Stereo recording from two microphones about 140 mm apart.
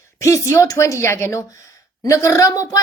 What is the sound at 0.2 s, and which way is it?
A woman's voice, 20° left (ahead or behind).